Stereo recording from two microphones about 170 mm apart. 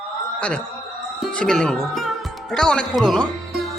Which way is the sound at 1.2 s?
5° left (ahead or behind).